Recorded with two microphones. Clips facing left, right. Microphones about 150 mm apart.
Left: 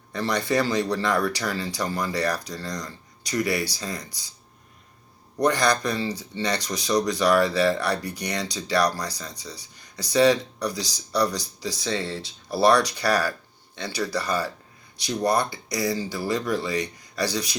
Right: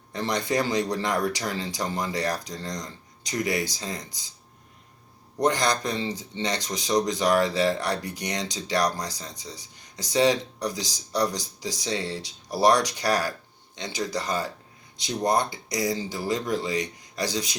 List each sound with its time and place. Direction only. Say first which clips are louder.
0.1 s speech: left 2 dB; 20° right (ahead or behind)
5.4 s speech: left 2 dB; 20° right (ahead or behind)